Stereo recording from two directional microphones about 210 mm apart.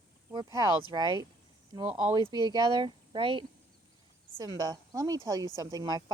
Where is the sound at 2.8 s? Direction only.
25° right (ahead or behind).